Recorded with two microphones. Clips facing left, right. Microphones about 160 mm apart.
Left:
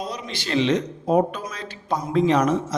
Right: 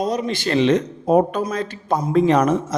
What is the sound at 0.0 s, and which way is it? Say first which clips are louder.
Speech: right 9 dB; 45° right (ahead or behind).